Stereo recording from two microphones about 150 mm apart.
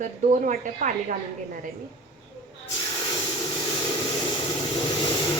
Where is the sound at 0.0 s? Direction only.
55° right (ahead or behind).